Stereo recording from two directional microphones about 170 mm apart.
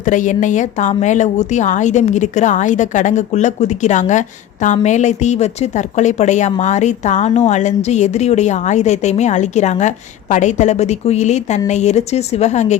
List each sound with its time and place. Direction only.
0.0 s speech: 50° left (ahead or behind)